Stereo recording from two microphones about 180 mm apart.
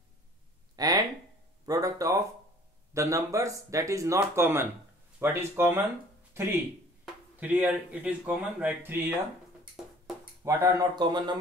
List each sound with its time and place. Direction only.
0.7 s a sound: 20° right (ahead or behind)
2.9 s speech: 15° right (ahead or behind)
10.4 s speech: 15° right (ahead or behind)